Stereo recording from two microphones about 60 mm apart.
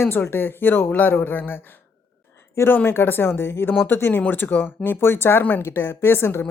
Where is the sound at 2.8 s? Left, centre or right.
Left.